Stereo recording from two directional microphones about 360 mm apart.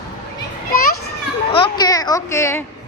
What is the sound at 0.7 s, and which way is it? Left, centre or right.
Children playing, left.